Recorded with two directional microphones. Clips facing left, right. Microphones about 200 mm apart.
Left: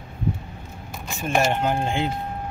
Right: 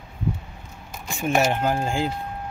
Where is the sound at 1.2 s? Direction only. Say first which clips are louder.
Right 1 dB; 5° right (ahead or behind).